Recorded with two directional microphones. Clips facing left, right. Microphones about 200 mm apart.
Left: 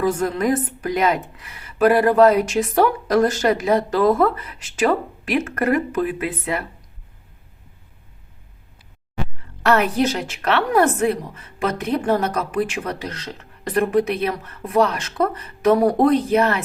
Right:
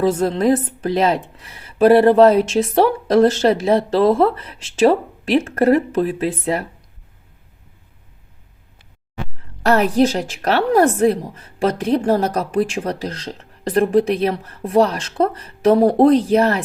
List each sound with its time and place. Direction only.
0.0 s a woman's voice: 25° right (ahead or behind)
9.6 s a woman's voice: 35° right (ahead or behind)